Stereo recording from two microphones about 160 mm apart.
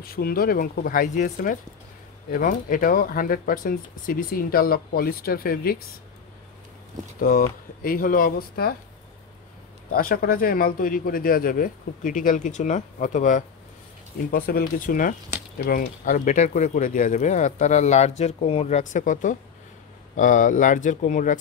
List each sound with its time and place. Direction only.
0.0 s speech: 65° left (ahead or behind)
7.2 s speech: 65° left (ahead or behind)
9.8 s speech: 65° left (ahead or behind)
14.1 s speech: 70° left (ahead or behind); by 21.4 s 55° left (ahead or behind)